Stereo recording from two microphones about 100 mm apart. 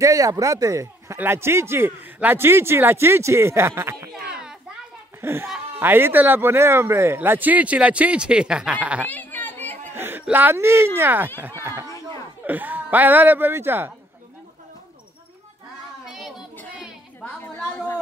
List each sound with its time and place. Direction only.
0.0 s speech: 35° right (ahead or behind)
4.1 s a sound: 5° right (ahead or behind)
5.2 s speech: 25° right (ahead or behind)
9.0 s chatter: 20° left (ahead or behind)
9.9 s a sound: 20° right (ahead or behind)
10.3 s speech: 20° right (ahead or behind)
12.4 s speech: 15° right (ahead or behind)
16.1 s child singing: 5° right (ahead or behind)